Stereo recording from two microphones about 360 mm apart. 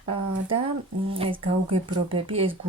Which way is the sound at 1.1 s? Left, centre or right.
Centre.